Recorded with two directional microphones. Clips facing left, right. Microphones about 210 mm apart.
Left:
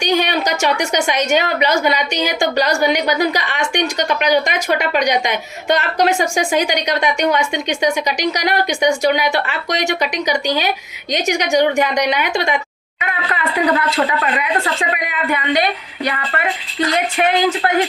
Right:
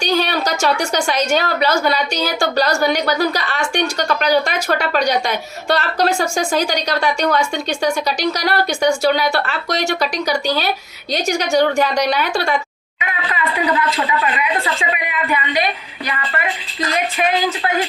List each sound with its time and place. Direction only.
0.0 s a woman's voice: 15° left (ahead or behind)
16.9 s speech: 65° left (ahead or behind)